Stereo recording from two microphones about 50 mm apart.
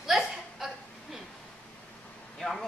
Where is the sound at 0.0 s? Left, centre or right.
Centre.